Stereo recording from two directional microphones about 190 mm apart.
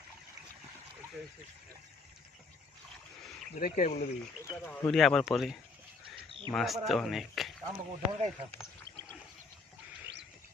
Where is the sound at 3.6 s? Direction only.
45° left (ahead or behind).